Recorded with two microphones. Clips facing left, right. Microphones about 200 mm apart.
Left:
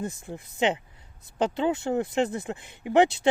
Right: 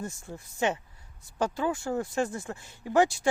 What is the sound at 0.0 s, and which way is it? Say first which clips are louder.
Speech: left 4 dB; 15° left (ahead or behind).